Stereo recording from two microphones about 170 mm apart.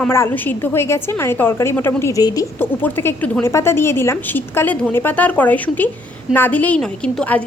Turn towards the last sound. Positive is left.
turn(degrees=5)  # may be behind; listen again after turning